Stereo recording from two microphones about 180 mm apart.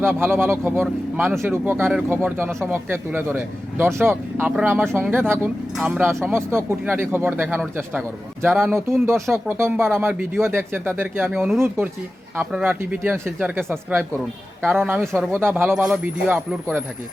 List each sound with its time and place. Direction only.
0.0 s speech: 10° right (ahead or behind)
2.5 s a woman's voice: centre (ahead or behind)
2.7 s speech: 10° right (ahead or behind)
14.6 s a woman's voice: centre (ahead or behind)